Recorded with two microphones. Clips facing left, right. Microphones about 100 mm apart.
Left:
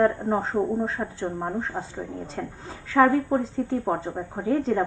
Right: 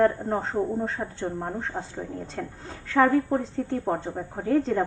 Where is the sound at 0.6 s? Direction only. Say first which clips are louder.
Left 2 dB; 15° left (ahead or behind).